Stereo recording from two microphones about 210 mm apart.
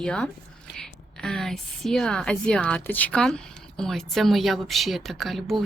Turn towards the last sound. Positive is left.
turn(degrees=0)  # may be behind; listen again after turning